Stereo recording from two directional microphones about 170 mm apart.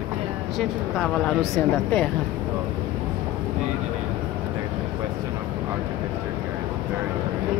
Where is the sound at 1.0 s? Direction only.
5° left (ahead or behind).